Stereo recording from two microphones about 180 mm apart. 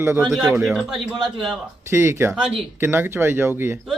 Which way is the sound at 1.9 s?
15° right (ahead or behind).